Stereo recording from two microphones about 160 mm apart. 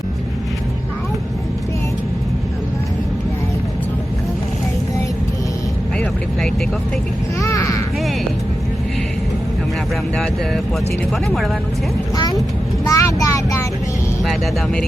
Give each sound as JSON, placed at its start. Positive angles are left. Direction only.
{"t": 7.4, "sound": "a sound", "side_deg": 20}
{"t": 12.1, "sound": "vehicle", "side_deg": 25}
{"t": 12.9, "sound": "child singing", "side_deg": 20}
{"t": 14.3, "sound": "speech", "side_deg": 0}